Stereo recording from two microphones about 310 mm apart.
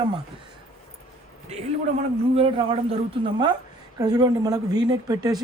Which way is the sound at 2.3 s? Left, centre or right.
Centre.